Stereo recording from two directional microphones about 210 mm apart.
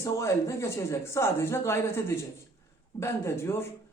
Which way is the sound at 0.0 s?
15° left (ahead or behind).